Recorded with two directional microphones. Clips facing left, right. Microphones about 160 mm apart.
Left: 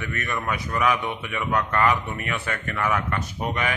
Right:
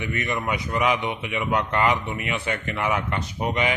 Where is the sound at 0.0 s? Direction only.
15° right (ahead or behind).